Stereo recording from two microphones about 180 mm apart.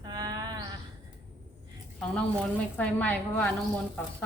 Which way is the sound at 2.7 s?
10° left (ahead or behind).